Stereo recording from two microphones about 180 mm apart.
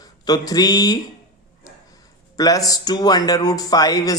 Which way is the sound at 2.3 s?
20° left (ahead or behind).